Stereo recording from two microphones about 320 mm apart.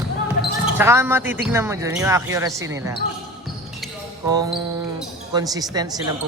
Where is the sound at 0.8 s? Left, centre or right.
Centre.